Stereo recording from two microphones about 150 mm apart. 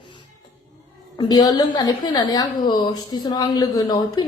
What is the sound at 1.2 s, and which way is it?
A woman's voice, 25° left (ahead or behind).